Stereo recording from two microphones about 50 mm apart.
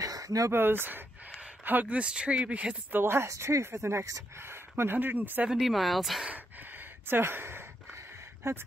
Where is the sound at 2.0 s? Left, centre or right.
Right.